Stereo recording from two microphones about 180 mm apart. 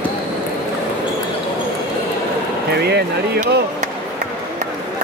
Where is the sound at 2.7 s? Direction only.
65° right (ahead or behind).